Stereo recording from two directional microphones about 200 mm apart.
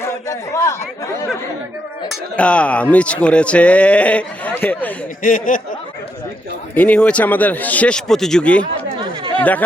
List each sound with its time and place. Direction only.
0.3 s speech: 15° left (ahead or behind)
2.0 s speech: 5° left (ahead or behind)
5.2 s speech: 40° left (ahead or behind)
6.7 s speech: 5° left (ahead or behind)